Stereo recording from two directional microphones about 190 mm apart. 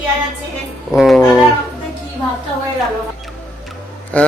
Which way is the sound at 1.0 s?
Centre (ahead or behind).